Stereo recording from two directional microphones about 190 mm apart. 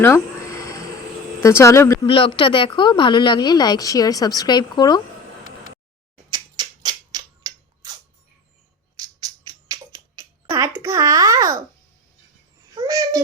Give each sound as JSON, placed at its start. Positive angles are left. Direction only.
{"t": 0.0, "sound": "a sound", "side_deg": 15}
{"t": 1.4, "sound": "speech", "side_deg": 15}
{"t": 2.0, "sound": "a woman's voice", "side_deg": 25}
{"t": 6.3, "sound": "a sound", "side_deg": -20}
{"t": 9.0, "sound": "music", "side_deg": -20}
{"t": 12.7, "sound": "babbling", "side_deg": -20}